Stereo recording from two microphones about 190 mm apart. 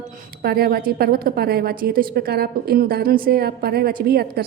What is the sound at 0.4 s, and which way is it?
A woman's voice, 55° right (ahead or behind).